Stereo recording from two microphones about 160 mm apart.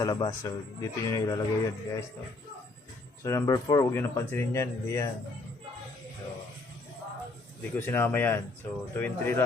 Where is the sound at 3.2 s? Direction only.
20° left (ahead or behind).